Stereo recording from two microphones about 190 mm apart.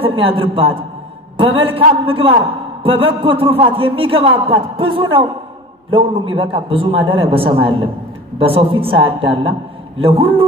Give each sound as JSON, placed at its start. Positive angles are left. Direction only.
{"t": 0.0, "sound": "a man's voice", "side_deg": -30}